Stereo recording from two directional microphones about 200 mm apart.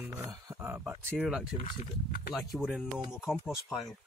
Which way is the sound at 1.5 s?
25° left (ahead or behind).